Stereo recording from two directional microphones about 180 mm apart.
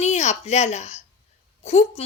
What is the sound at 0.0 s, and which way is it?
A woman's voice, 40° left (ahead or behind).